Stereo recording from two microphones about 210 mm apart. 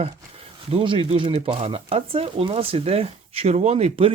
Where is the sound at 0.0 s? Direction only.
30° right (ahead or behind).